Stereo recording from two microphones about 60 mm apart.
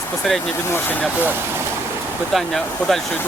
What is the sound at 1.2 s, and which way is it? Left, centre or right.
Speech, right.